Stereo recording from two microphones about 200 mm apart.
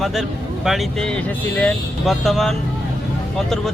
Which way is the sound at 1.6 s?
Centre (ahead or behind).